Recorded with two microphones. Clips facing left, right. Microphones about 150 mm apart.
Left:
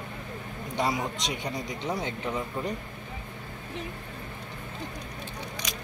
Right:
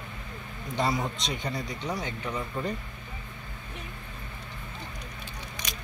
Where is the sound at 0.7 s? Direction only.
15° left (ahead or behind).